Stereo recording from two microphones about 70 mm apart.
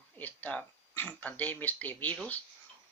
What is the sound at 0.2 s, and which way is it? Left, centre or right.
Speech, left.